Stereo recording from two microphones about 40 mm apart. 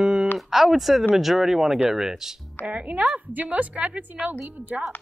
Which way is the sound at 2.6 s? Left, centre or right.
Right.